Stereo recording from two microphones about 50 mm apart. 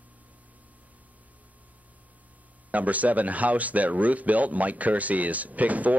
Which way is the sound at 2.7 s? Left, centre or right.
Right.